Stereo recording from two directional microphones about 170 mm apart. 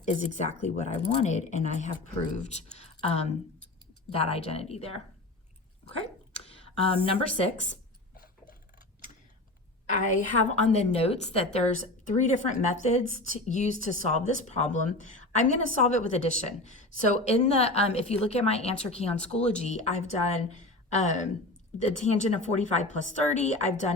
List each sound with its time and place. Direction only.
0.0 s a woman's voice: 45° left (ahead or behind)
6.4 s speech: 35° left (ahead or behind)
9.9 s a woman's voice: 50° left (ahead or behind)